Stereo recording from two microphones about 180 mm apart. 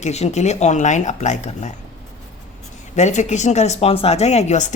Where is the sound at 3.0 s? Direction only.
40° left (ahead or behind).